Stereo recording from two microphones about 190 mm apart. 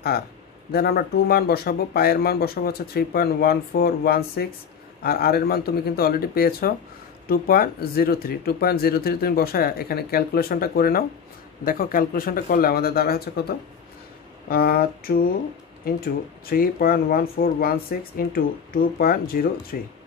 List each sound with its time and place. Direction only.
0.7 s speech: 55° left (ahead or behind)
14.5 s speech: 50° left (ahead or behind)
16.4 s speech: 50° left (ahead or behind)